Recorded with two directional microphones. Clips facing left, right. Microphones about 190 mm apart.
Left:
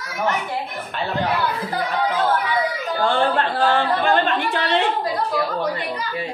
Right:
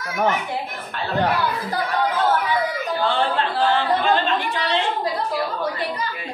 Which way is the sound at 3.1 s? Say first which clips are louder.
Left 4 dB; 50° left (ahead or behind).